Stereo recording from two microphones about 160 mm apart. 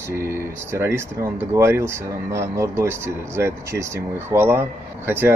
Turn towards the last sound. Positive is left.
turn(degrees=-15)  # may be behind; listen again after turning